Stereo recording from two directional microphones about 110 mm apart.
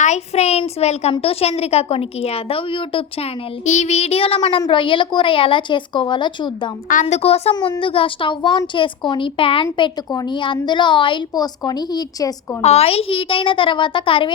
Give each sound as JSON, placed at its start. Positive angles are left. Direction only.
{"t": 0.0, "sound": "a child's voice", "side_deg": 80}
{"t": 3.7, "sound": "child singing", "side_deg": 85}
{"t": 4.7, "sound": "a woman's voice", "side_deg": 50}
{"t": 7.1, "sound": "child singing", "side_deg": 70}
{"t": 7.8, "sound": "a woman's voice", "side_deg": 50}
{"t": 12.6, "sound": "a woman's voice", "side_deg": 70}